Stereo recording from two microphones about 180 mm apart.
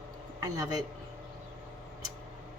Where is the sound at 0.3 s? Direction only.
20° right (ahead or behind).